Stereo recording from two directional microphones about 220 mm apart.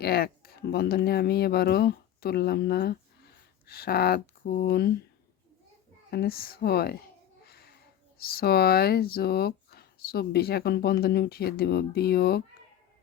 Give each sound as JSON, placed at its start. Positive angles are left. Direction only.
{"t": 0.0, "sound": "speech", "side_deg": 45}
{"t": 6.1, "sound": "speech", "side_deg": 45}
{"t": 7.4, "sound": "a sound", "side_deg": 45}
{"t": 8.2, "sound": "speech", "side_deg": 45}